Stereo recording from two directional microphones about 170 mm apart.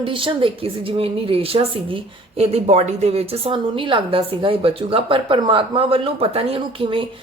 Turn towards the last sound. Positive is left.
turn(degrees=-30)  # may be behind; listen again after turning